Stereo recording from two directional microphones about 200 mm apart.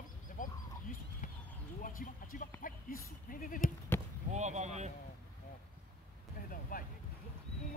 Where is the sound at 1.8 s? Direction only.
45° left (ahead or behind).